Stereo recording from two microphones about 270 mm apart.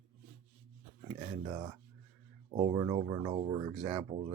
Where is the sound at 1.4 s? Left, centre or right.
Centre.